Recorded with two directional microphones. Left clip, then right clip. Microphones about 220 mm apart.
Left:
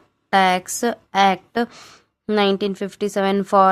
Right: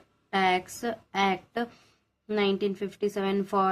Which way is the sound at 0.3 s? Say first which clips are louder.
Left 9 dB; 50° left (ahead or behind).